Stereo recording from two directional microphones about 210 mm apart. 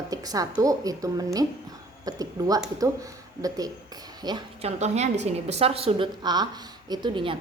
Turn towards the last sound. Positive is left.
turn(degrees=-25)  # may be behind; listen again after turning